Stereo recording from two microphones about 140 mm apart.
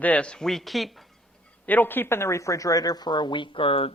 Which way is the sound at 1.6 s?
15° left (ahead or behind).